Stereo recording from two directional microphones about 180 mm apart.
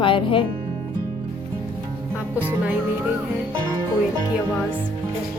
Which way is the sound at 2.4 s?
10° right (ahead or behind).